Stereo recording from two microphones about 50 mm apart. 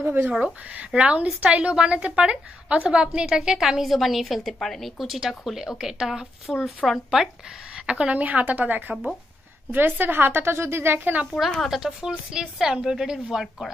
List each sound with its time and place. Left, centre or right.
0.0 s speech: right
0.7 s a woman's voice: right; by 7.2 s centre
7.8 s a woman's voice: centre
8.2 s a woman's voice: right
11.3 s a woman's voice: centre